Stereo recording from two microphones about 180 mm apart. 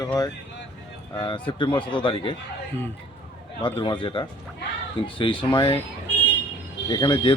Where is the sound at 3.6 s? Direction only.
25° left (ahead or behind).